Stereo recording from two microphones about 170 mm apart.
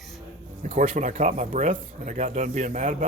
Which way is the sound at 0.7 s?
50° right (ahead or behind).